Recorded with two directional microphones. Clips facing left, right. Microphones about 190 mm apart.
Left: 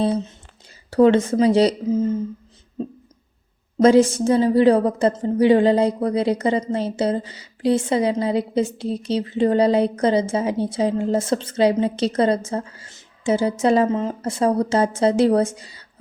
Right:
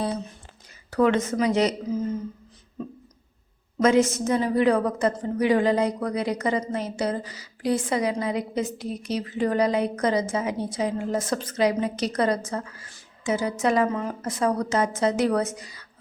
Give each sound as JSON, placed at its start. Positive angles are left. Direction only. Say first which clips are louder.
{"t": 0.0, "sound": "a woman's voice", "louder": "left 7 dB", "side_deg": 25}
{"t": 3.8, "sound": "a woman's voice", "louder": "left 6 dB", "side_deg": 30}